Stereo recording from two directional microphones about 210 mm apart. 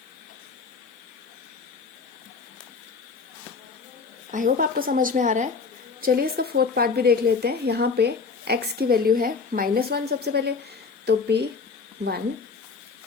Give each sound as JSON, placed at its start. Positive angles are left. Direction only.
{"t": 4.3, "sound": "a woman's voice", "side_deg": -40}